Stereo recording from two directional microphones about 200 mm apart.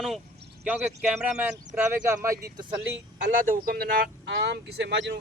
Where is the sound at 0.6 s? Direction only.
5° right (ahead or behind).